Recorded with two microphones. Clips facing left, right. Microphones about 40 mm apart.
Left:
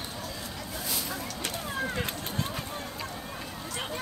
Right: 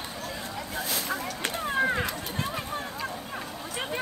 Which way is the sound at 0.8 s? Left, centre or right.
Right.